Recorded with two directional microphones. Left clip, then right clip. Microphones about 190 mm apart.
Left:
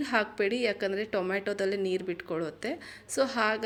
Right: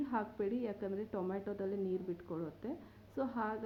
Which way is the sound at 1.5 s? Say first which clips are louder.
Left 11 dB; 40° left (ahead or behind).